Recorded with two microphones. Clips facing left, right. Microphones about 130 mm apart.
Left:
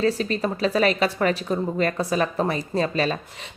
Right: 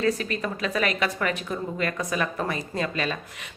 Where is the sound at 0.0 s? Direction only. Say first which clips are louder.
Left 3 dB; 30° left (ahead or behind).